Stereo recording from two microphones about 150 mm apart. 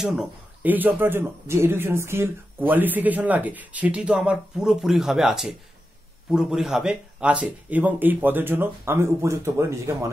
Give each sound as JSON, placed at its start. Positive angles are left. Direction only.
{"t": 0.0, "sound": "a man's voice", "side_deg": -5}